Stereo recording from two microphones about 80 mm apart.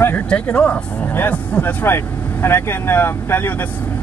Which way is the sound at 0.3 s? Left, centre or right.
Centre.